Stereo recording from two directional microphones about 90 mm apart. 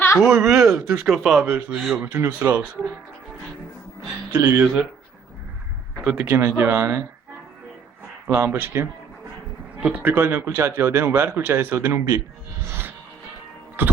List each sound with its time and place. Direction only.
0.2 s speech: 5° right (ahead or behind)
2.0 s speech: 25° right (ahead or behind)
4.3 s speech: 25° right (ahead or behind)
4.6 s speech: 10° right (ahead or behind)
6.2 s speech: 25° right (ahead or behind)
8.3 s speech: 25° right (ahead or behind)
12.6 s music: 25° right (ahead or behind)